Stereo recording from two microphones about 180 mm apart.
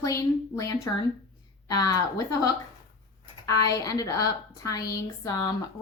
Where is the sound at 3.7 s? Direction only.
20° left (ahead or behind).